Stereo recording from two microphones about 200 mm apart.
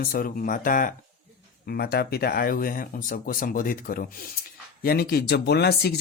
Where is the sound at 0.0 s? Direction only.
45° left (ahead or behind).